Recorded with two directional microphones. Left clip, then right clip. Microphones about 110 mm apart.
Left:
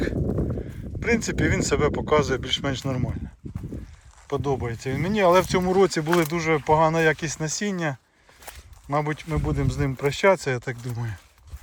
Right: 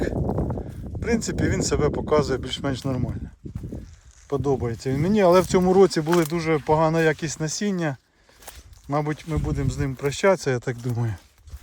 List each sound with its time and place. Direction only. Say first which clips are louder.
0.3 s a sound: right 1 dB; 10° left (ahead or behind)
0.5 s speech: even; 30° right (ahead or behind)
3.4 s a sound: even; 5° right (ahead or behind)
4.3 s speech: right 2 dB; 55° right (ahead or behind)
6.1 s speech: even; 45° right (ahead or behind)
9.2 s speech: left 1 dB; 20° right (ahead or behind)
10.1 s speech: even; 40° right (ahead or behind); by 11.2 s 80° right